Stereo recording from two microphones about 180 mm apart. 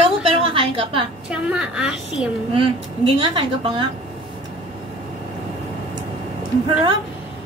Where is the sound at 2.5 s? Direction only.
30° right (ahead or behind).